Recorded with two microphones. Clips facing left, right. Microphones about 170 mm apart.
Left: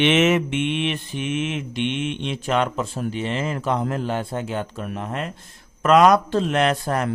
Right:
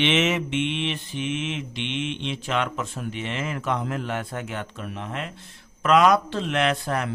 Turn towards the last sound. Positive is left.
turn(degrees=40)  # may be behind; listen again after turning